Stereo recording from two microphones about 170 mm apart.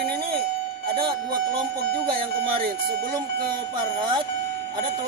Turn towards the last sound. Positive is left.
turn(degrees=-30)  # may be behind; listen again after turning